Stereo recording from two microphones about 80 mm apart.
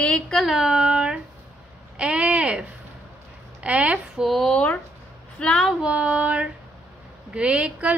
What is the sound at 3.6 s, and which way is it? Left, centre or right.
Speech, centre.